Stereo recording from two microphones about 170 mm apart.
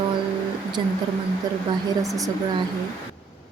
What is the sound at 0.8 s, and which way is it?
Speech, 30° right (ahead or behind).